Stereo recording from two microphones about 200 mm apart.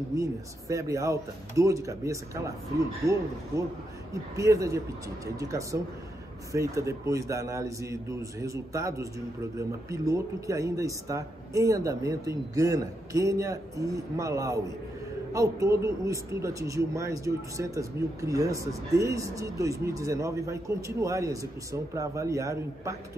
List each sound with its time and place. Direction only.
0.1 s a man's voice: 15° right (ahead or behind)